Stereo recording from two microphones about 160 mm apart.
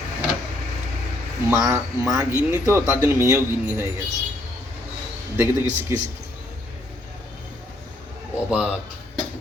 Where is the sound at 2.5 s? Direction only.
15° right (ahead or behind).